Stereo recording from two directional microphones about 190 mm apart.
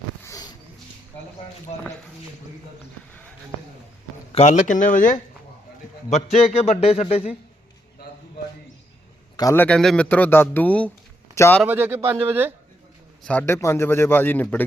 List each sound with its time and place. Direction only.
0.3 s a sound: 20° left (ahead or behind)
4.3 s a man's voice: 35° left (ahead or behind)
6.1 s a man's voice: 35° left (ahead or behind)
9.4 s a man's voice: 15° left (ahead or behind)
11.6 s speech: 10° right (ahead or behind)
13.2 s a man's voice: 10° left (ahead or behind)